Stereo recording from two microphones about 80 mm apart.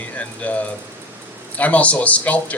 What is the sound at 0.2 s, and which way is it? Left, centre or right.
A man's voice, centre.